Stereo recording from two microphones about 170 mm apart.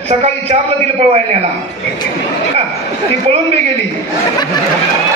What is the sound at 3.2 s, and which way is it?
Speech, 35° right (ahead or behind).